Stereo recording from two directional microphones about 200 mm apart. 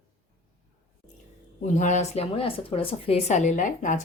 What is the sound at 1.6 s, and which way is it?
A woman's voice, 35° left (ahead or behind).